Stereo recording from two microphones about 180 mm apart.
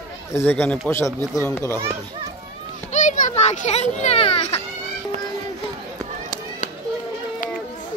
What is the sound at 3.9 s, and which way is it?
Speech, 35° left (ahead or behind).